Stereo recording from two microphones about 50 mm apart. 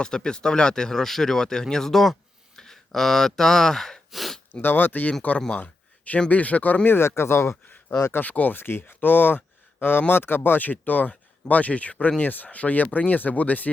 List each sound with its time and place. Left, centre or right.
0.0 s speech: centre
4.1 s a sound: centre
4.6 s speech: left
6.9 s speech: left
8.2 s speech: left
8.5 s speech: left
8.9 s speech: left